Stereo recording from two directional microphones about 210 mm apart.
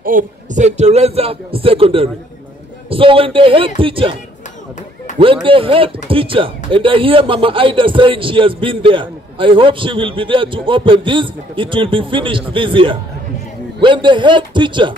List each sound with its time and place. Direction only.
0.0 s speech: 35° right (ahead or behind)
5.2 s speech: 25° right (ahead or behind)